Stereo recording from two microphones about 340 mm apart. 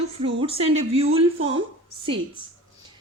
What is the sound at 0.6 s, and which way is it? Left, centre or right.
Speech, centre.